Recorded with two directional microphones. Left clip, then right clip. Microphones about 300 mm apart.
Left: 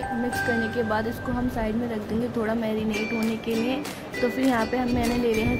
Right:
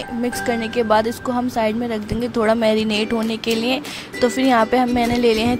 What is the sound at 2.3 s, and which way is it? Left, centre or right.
Speech, right.